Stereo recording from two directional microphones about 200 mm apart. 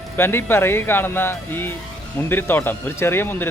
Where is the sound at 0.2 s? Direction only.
10° left (ahead or behind).